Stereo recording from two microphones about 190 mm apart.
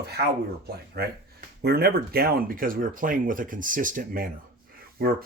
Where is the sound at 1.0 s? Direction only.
55° right (ahead or behind).